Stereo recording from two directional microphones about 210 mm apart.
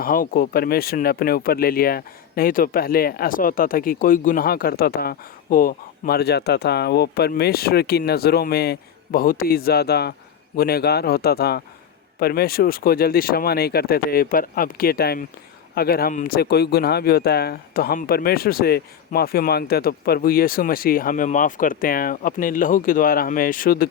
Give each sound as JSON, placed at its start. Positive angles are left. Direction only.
{"t": 0.0, "sound": "speech", "side_deg": 40}